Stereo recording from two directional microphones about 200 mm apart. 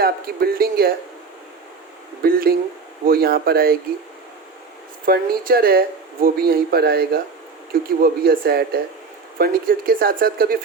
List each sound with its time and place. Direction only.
0.0 s speech: 50° right (ahead or behind)
2.2 s speech: 45° right (ahead or behind)
5.0 s speech: 50° right (ahead or behind)